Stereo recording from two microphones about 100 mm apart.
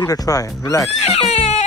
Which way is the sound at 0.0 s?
35° left (ahead or behind).